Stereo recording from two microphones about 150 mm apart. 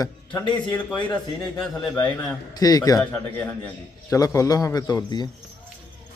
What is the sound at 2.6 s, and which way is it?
Speech, 25° left (ahead or behind).